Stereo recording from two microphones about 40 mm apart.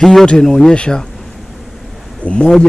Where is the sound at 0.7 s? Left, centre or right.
Left.